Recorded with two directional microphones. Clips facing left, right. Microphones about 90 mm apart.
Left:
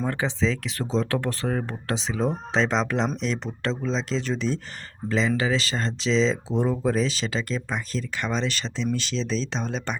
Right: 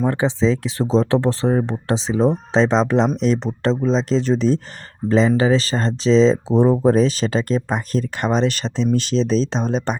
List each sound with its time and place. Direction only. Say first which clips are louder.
0.0 s speech: right 7 dB; 20° right (ahead or behind); by 10.0 s 40° right (ahead or behind)